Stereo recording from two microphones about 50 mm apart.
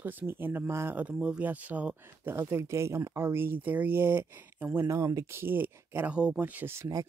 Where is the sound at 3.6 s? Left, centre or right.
Right.